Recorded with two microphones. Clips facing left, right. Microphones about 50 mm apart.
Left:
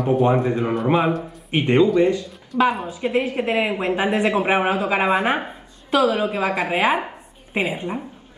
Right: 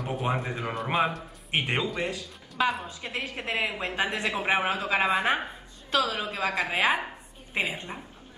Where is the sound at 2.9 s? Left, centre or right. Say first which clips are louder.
Left 13 dB; left.